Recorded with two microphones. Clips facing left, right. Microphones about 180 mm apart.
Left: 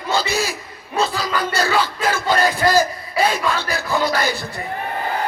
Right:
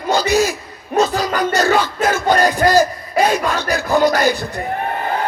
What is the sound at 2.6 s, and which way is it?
Crowd, 45° right (ahead or behind).